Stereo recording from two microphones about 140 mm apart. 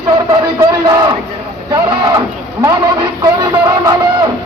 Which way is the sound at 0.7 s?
25° right (ahead or behind).